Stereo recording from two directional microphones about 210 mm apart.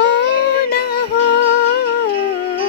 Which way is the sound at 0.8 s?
50° left (ahead or behind).